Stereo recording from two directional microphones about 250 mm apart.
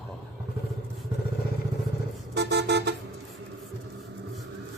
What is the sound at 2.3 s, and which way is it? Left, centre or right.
Vehicle, right.